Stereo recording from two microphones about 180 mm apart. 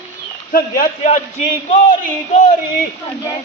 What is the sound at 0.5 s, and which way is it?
Speech, 55° left (ahead or behind).